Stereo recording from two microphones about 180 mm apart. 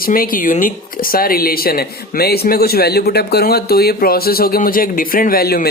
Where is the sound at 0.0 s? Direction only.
50° left (ahead or behind).